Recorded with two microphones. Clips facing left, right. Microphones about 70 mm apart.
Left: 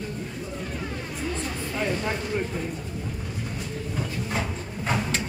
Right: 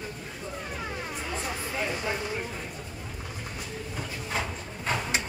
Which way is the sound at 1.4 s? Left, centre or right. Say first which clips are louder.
Left 2 dB; centre.